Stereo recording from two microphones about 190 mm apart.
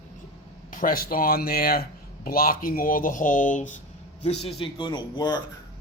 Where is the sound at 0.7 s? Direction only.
45° left (ahead or behind).